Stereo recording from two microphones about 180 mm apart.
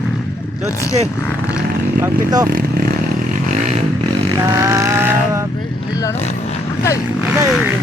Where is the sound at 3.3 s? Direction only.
45° right (ahead or behind).